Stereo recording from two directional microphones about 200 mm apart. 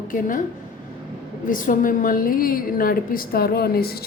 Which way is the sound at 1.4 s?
40° left (ahead or behind).